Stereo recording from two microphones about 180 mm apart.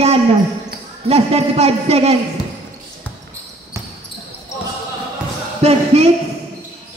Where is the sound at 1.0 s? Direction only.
35° right (ahead or behind).